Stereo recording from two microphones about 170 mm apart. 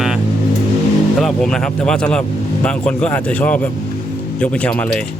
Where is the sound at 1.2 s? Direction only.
Centre (ahead or behind).